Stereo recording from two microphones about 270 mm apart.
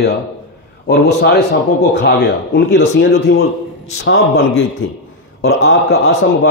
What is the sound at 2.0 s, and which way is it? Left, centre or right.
A man's voice, left.